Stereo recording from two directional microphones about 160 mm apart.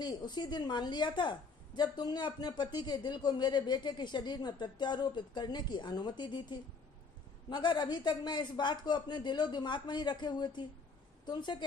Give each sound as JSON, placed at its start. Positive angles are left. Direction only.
{"t": 0.0, "sound": "speech", "side_deg": 25}